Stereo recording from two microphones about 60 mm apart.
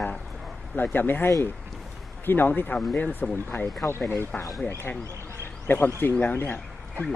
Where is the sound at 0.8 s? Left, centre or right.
Left.